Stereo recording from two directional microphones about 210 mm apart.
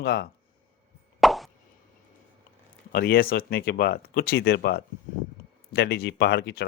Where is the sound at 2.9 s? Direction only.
45° left (ahead or behind).